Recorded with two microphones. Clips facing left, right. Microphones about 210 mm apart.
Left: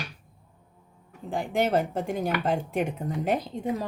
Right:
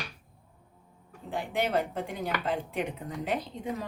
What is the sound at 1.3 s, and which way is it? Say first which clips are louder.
Speech: left 4 dB; 45° left (ahead or behind).